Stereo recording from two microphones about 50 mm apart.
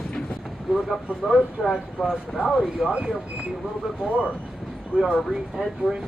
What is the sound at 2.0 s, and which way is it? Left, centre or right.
Speech, centre.